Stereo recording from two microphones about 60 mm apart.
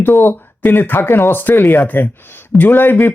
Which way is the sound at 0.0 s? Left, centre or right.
Left.